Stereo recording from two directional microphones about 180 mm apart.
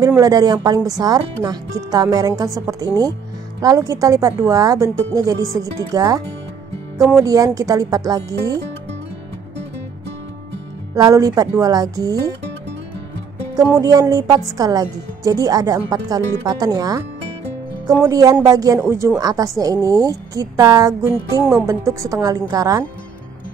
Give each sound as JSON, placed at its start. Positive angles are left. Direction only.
{"t": 0.0, "sound": "a woman's voice", "side_deg": -20}
{"t": 7.2, "sound": "a woman's voice", "side_deg": -20}
{"t": 11.0, "sound": "a woman's voice", "side_deg": -20}
{"t": 13.7, "sound": "a woman's voice", "side_deg": -20}
{"t": 18.0, "sound": "a woman's voice", "side_deg": -20}